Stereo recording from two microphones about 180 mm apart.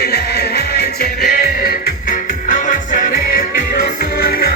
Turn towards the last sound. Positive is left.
turn(degrees=50)  # may be behind; listen again after turning